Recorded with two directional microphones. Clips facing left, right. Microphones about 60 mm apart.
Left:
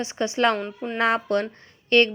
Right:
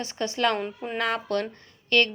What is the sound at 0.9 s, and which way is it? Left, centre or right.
A woman's voice, left.